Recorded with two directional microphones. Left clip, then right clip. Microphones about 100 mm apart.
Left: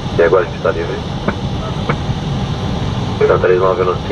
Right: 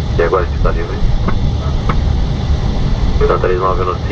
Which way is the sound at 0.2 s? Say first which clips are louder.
Left 3 dB; 20° left (ahead or behind).